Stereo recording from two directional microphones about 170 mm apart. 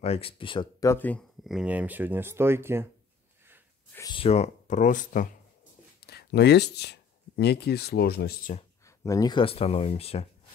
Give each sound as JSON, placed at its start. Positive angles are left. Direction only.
{"t": 0.0, "sound": "speech", "side_deg": 35}
{"t": 0.8, "sound": "speech", "side_deg": 10}
{"t": 1.4, "sound": "speech", "side_deg": -5}
{"t": 4.1, "sound": "speech", "side_deg": 35}
{"t": 6.0, "sound": "speech", "side_deg": 70}
{"t": 8.8, "sound": "speech", "side_deg": 20}